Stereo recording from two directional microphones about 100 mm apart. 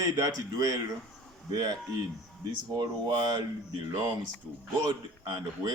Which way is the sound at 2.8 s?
40° right (ahead or behind).